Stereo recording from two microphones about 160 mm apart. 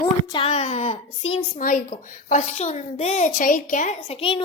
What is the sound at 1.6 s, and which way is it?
Speech, 60° left (ahead or behind).